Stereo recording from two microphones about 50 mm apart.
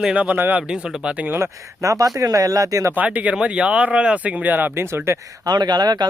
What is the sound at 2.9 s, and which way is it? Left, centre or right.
Speech, right.